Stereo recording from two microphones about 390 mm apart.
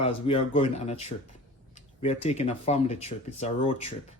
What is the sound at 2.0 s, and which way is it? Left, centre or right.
Speech, centre.